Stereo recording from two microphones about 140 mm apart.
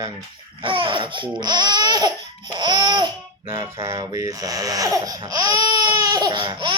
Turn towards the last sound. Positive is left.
turn(degrees=-35)  # may be behind; listen again after turning